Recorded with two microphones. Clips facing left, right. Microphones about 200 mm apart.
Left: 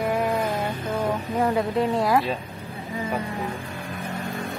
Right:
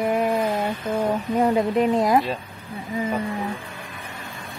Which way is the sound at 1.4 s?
20° right (ahead or behind).